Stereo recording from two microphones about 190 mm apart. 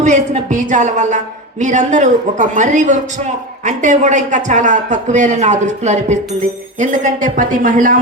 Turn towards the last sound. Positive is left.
turn(degrees=-45)  # may be behind; listen again after turning